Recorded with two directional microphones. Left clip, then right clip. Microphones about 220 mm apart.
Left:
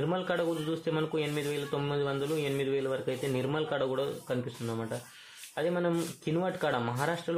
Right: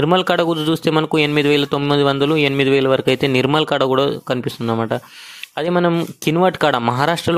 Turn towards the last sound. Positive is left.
turn(degrees=-50)  # may be behind; listen again after turning